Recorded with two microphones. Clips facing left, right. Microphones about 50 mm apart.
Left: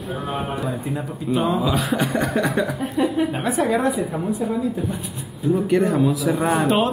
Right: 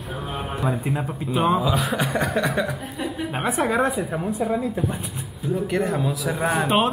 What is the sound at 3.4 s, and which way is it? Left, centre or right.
Speech, right.